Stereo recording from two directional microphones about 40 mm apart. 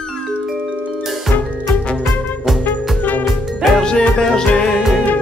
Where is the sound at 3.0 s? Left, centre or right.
Left.